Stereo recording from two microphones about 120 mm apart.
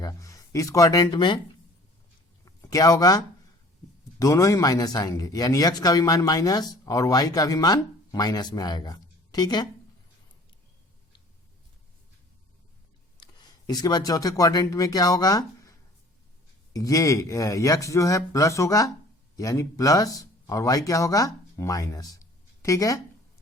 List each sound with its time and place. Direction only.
0.0 s speech: 30° left (ahead or behind)
2.4 s speech: 25° left (ahead or behind)
13.2 s a sound: 40° left (ahead or behind)
13.7 s speech: 35° left (ahead or behind)
16.7 s speech: 30° left (ahead or behind)